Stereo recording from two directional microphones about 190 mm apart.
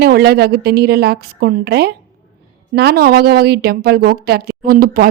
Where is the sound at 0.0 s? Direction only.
55° right (ahead or behind).